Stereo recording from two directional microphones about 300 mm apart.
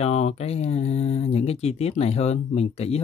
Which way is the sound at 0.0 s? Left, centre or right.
Left.